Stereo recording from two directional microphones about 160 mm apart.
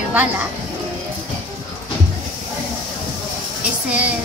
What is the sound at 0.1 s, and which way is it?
Speech, 10° right (ahead or behind).